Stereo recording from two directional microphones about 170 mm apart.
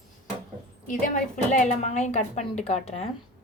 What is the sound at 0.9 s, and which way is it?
A woman's voice, 50° left (ahead or behind).